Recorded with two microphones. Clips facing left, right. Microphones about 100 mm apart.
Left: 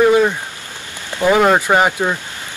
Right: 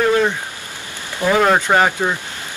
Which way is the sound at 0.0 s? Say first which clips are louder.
Left 4 dB; 10° left (ahead or behind).